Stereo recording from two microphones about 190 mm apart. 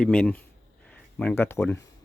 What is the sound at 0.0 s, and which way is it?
Speech, 5° left (ahead or behind).